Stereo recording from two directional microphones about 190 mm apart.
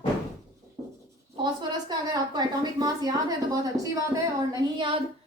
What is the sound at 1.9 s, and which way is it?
A woman's voice, 20° right (ahead or behind).